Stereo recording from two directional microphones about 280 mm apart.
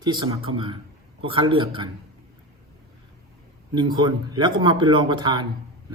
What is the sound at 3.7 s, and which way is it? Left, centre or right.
A man's voice, centre.